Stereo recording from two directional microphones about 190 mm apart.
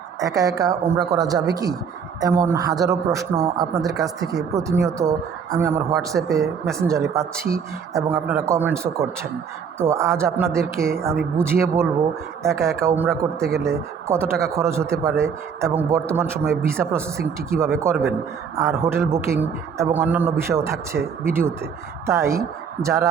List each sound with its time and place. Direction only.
0.2 s a man's voice: 20° right (ahead or behind)
9.7 s a man's voice: 15° right (ahead or behind)
13.1 s a man's voice: centre (ahead or behind)
13.6 s a man's voice: 15° right (ahead or behind)